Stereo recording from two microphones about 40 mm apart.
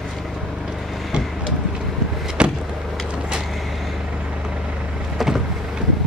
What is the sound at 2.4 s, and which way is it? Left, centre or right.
Vehicle, right.